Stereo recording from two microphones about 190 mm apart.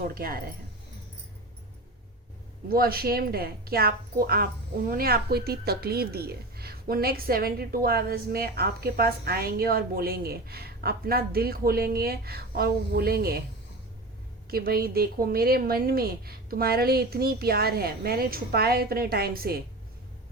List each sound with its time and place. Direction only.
0.1 s a woman's voice: 50° right (ahead or behind)
2.6 s a woman's voice: 50° right (ahead or behind)
14.5 s a woman's voice: 55° right (ahead or behind)